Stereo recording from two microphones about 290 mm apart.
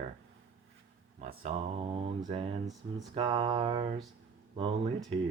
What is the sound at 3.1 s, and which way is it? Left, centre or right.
Mantra, centre.